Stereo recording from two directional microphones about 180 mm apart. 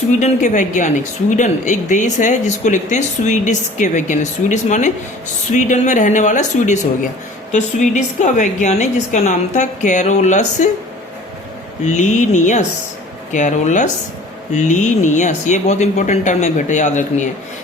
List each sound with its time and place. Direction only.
0.2 s a woman's voice: 45° left (ahead or behind)
11.9 s a woman's voice: 40° left (ahead or behind)